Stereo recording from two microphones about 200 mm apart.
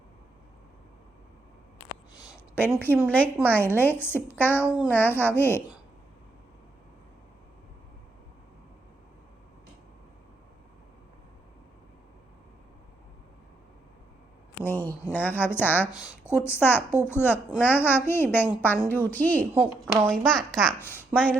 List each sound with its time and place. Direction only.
2.1 s a sound: 15° left (ahead or behind)
2.7 s speech: 10° left (ahead or behind)
4.6 s speech: 5° right (ahead or behind)
4.9 s speech: 10° left (ahead or behind)
14.7 s speech: 10° left (ahead or behind)
19.5 s a woman's voice: 10° right (ahead or behind)
20.2 s speech: 5° left (ahead or behind)